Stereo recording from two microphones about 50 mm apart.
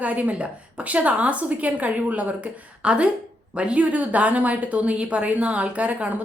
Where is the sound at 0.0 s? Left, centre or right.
Right.